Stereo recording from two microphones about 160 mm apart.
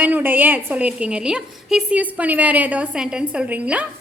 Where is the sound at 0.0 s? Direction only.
10° right (ahead or behind).